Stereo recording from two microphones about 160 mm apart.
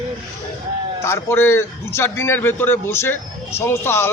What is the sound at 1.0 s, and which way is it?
A man's voice, 15° left (ahead or behind).